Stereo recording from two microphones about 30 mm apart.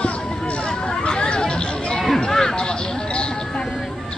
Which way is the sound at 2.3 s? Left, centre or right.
Centre.